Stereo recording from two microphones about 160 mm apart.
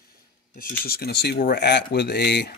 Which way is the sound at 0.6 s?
65° left (ahead or behind).